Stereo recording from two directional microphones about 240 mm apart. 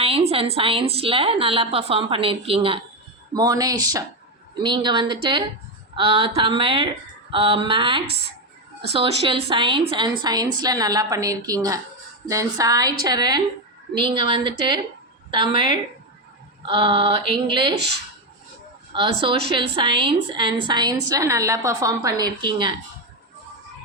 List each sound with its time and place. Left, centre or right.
0.0 s a woman's voice: right
18.9 s a woman's voice: right